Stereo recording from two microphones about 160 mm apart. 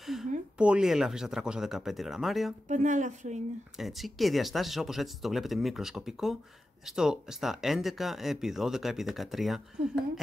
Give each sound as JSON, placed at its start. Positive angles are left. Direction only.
{"t": 0.0, "sound": "a sound", "side_deg": 0}
{"t": 0.6, "sound": "speech", "side_deg": -5}
{"t": 2.7, "sound": "speech", "side_deg": -50}
{"t": 3.7, "sound": "speech", "side_deg": 0}